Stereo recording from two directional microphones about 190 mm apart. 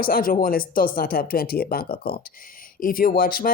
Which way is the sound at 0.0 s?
50° left (ahead or behind).